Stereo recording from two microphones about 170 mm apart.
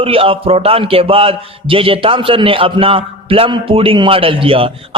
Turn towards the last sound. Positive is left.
turn(degrees=-35)  # may be behind; listen again after turning